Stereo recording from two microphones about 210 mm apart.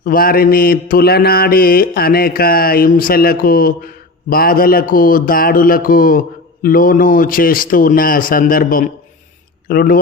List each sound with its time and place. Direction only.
0.0 s mantra: 45° left (ahead or behind)